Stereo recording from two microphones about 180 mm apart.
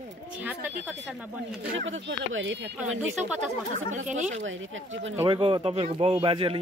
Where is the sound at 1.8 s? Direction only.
90° right.